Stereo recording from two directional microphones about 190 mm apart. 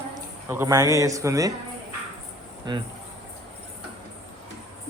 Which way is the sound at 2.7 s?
25° right (ahead or behind).